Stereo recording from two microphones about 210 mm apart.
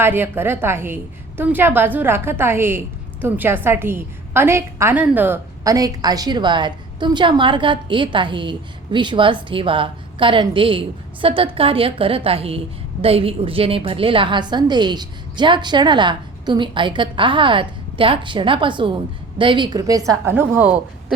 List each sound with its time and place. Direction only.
0.0 s a woman's voice: 10° right (ahead or behind)